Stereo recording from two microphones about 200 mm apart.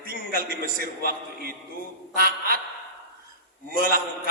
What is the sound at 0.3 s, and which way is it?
A man's voice, 45° right (ahead or behind).